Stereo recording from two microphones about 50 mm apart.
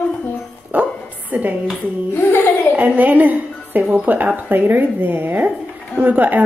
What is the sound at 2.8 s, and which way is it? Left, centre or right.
A woman's voice, right.